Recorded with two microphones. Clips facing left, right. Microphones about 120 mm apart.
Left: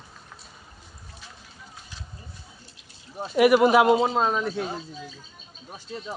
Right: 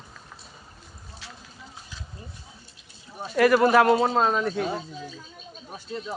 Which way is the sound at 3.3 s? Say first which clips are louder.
Left 1 dB; 15° left (ahead or behind).